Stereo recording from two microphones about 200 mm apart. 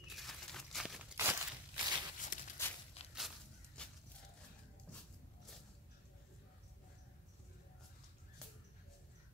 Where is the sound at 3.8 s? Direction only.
5° left (ahead or behind).